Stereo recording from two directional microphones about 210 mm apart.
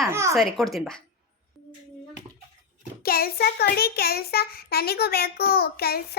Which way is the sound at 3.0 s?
45° left (ahead or behind).